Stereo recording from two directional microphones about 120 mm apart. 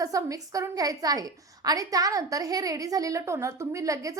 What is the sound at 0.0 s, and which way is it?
A woman's voice, 30° right (ahead or behind).